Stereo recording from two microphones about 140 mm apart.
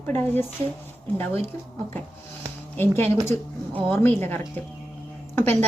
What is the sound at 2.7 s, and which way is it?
A woman's voice, 15° left (ahead or behind).